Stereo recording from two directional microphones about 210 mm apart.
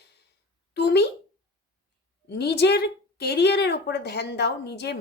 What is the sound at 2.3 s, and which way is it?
Speech, 50° left (ahead or behind).